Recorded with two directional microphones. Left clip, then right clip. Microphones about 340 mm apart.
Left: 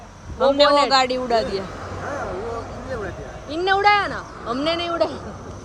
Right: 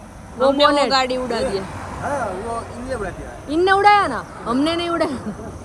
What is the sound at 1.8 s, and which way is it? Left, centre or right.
Vehicle, right.